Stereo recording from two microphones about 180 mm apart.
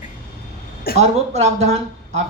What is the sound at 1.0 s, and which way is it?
Speech, 35° right (ahead or behind).